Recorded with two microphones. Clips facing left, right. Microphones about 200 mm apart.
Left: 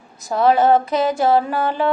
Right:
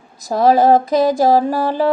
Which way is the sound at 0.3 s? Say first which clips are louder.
Right 3 dB; 35° right (ahead or behind).